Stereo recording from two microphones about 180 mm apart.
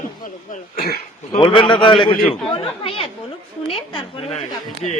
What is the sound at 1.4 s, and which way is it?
A man's voice, 30° left (ahead or behind).